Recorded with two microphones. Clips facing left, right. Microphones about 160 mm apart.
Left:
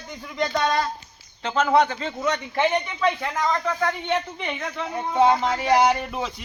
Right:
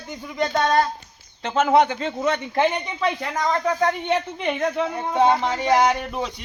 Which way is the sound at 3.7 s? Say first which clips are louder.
Right 3 dB; 35° right (ahead or behind).